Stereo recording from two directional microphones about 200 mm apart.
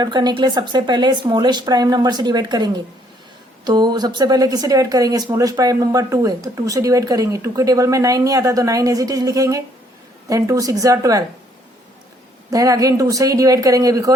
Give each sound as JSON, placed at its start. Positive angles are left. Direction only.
{"t": 0.0, "sound": "speech", "side_deg": -20}
{"t": 12.5, "sound": "speech", "side_deg": -15}